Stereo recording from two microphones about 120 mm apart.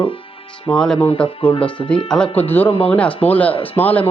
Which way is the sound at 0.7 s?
30° left (ahead or behind).